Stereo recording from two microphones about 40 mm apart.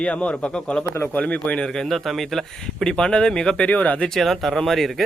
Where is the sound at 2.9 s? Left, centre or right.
Left.